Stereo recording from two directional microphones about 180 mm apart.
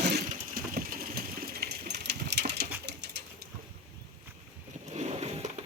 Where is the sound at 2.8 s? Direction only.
70° right (ahead or behind).